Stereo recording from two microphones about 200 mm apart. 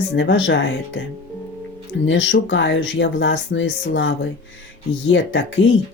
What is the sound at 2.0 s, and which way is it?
Speech, 65° left (ahead or behind).